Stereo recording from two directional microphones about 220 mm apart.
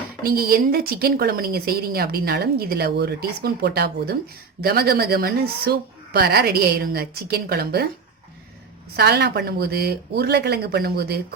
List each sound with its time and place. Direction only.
0.2 s speech: 45° right (ahead or behind)
9.0 s speech: 45° right (ahead or behind)